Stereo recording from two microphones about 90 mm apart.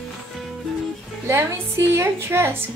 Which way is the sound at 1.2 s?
30° right (ahead or behind).